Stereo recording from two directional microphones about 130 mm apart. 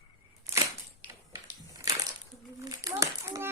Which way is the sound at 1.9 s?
25° right (ahead or behind).